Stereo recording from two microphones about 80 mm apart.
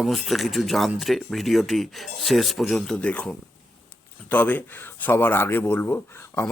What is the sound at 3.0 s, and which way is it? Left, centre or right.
Speech, centre.